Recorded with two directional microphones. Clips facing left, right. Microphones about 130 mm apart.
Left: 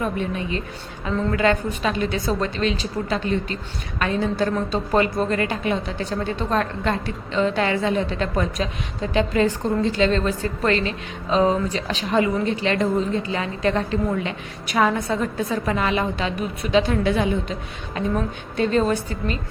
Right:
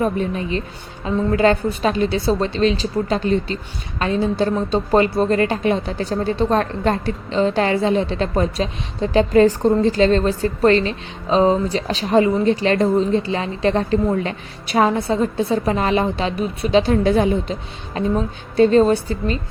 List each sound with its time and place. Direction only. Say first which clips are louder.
0.0 s a woman's voice: right 4 dB; 35° right (ahead or behind)